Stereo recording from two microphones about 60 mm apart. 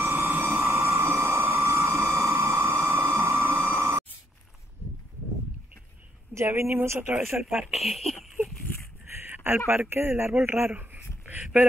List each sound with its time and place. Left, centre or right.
0.0 s vehicle: right
0.7 s a sound: right
6.3 s speech: right
7.6 s speech: centre
9.1 s a sound: right
9.7 s speech: right